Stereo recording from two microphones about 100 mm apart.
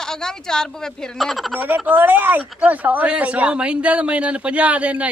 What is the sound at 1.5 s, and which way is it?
Speech, 20° right (ahead or behind).